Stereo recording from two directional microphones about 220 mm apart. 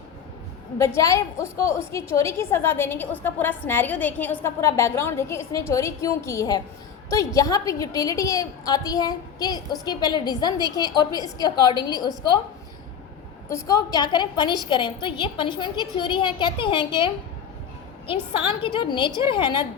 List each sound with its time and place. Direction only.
0.8 s a woman's voice: 15° left (ahead or behind)
13.5 s a woman's voice: 15° left (ahead or behind)
18.1 s a woman's voice: 25° left (ahead or behind)